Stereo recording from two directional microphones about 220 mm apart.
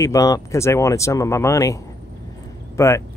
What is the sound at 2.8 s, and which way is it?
Speech, 15° left (ahead or behind).